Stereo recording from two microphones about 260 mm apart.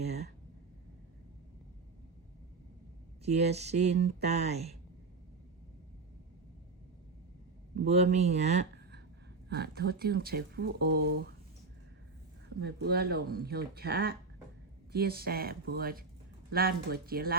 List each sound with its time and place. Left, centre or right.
3.2 s speech: right
7.9 s speech: right
9.5 s speech: right
12.5 s speech: right